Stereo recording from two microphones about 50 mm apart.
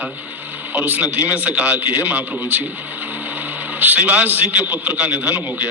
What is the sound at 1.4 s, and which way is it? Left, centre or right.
Speech, right.